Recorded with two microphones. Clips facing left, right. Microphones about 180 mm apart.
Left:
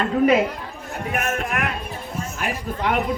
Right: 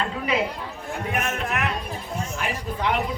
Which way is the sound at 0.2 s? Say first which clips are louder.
Left 10 dB; 50° left (ahead or behind).